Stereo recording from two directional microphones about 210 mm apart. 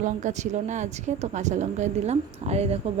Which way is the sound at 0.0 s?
35° right (ahead or behind).